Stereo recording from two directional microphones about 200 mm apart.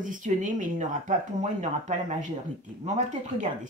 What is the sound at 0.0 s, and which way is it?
Speech, 40° right (ahead or behind).